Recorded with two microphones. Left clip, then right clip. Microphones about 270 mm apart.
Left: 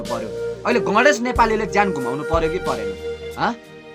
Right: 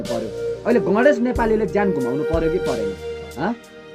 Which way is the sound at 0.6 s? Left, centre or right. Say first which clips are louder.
Even; centre.